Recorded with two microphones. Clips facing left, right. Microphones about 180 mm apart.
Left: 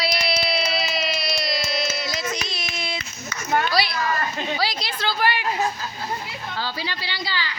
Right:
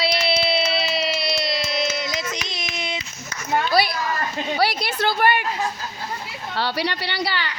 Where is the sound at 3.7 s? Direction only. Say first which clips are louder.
Right 2 dB; 50° right (ahead or behind).